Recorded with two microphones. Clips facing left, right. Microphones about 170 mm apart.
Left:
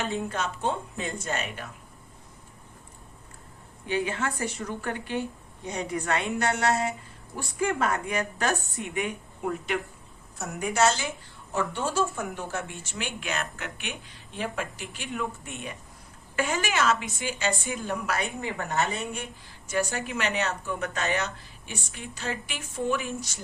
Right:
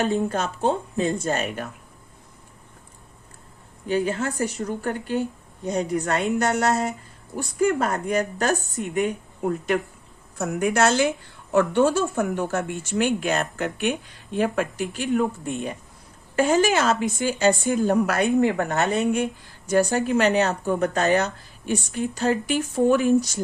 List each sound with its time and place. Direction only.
0.0 s speech: 40° right (ahead or behind)
3.8 s speech: 40° right (ahead or behind)
10.3 s a woman's voice: 55° right (ahead or behind); by 13.9 s 40° right (ahead or behind)
14.3 s speech: 50° right (ahead or behind)
19.6 s speech: 40° right (ahead or behind)